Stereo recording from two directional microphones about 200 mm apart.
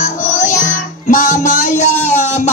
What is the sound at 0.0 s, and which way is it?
Music, 40° left (ahead or behind).